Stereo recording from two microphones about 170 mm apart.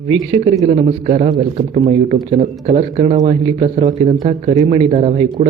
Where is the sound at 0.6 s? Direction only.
45° right (ahead or behind).